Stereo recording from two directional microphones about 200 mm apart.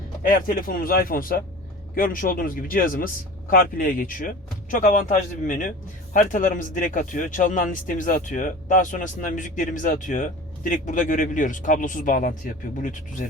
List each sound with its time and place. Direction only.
0.3 s a man's voice: 45° left (ahead or behind)